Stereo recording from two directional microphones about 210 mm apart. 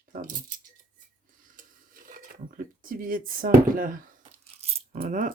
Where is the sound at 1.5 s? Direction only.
40° right (ahead or behind).